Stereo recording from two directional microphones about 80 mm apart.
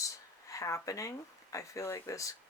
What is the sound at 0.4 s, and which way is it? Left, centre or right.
Speech, left.